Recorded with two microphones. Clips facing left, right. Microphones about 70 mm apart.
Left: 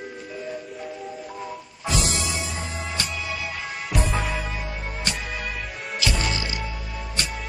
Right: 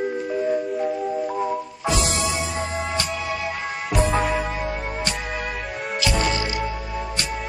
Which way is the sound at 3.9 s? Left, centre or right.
Centre.